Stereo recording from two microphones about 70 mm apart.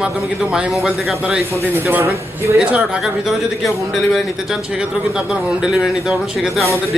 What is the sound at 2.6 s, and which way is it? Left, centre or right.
Speech, centre.